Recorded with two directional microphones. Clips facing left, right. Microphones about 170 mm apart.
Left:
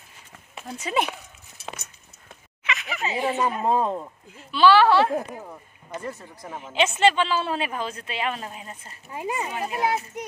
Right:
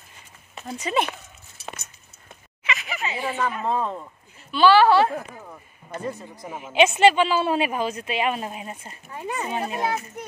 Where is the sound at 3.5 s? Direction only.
35° left (ahead or behind).